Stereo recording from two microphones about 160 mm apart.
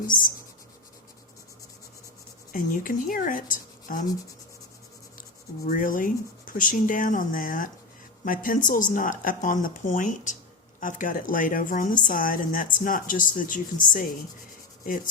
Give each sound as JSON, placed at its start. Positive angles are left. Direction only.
{"t": 0.1, "sound": "a woman's voice", "side_deg": 60}
{"t": 2.5, "sound": "a woman's voice", "side_deg": 60}
{"t": 5.6, "sound": "a woman's voice", "side_deg": 60}